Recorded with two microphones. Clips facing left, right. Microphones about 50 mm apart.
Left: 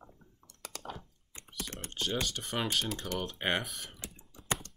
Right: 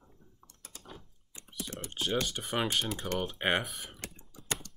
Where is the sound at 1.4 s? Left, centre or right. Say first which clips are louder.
Right 1 dB; left.